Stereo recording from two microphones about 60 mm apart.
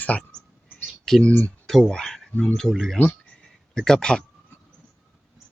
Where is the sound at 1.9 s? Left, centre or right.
Centre.